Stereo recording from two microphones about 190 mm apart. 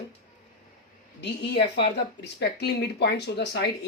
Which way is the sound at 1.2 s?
65° left (ahead or behind).